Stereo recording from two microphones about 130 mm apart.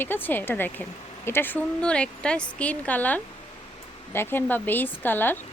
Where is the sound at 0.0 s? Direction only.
15° left (ahead or behind).